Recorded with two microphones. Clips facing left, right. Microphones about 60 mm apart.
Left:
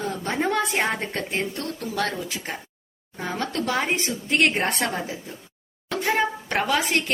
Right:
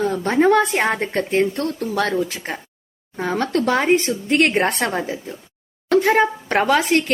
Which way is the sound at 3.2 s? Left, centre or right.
Right.